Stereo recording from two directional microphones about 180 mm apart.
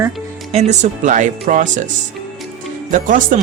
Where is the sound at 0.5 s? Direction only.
40° right (ahead or behind).